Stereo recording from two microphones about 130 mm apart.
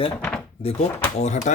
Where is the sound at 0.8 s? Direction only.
65° left (ahead or behind).